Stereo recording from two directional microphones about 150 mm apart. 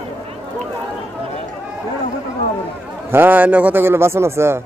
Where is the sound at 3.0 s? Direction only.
15° right (ahead or behind).